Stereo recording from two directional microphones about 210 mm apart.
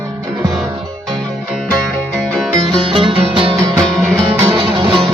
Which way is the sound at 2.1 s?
5° left (ahead or behind).